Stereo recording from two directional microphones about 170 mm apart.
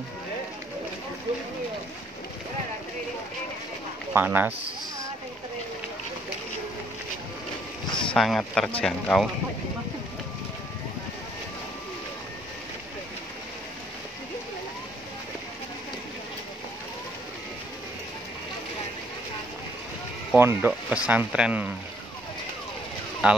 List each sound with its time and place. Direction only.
4.1 s speech: 10° right (ahead or behind)
7.9 s speech: 5° left (ahead or behind)
20.3 s speech: 10° right (ahead or behind)
23.2 s speech: 5° right (ahead or behind)